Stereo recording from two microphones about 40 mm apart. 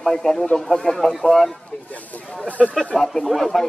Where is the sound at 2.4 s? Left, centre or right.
Left.